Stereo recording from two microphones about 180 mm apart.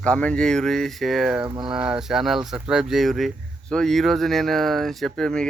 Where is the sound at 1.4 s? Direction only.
20° right (ahead or behind).